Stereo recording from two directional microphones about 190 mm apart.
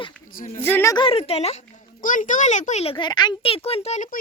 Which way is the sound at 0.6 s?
15° left (ahead or behind).